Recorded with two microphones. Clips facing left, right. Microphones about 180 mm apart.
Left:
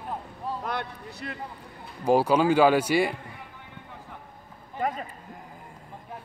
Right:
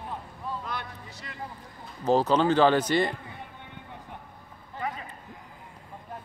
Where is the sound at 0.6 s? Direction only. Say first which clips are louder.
Left 5 dB; 60° left (ahead or behind).